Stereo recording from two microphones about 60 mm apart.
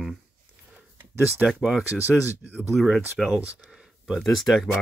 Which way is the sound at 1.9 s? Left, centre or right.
Right.